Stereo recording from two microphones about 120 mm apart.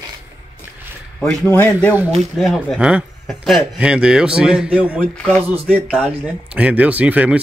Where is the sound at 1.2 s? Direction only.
15° left (ahead or behind).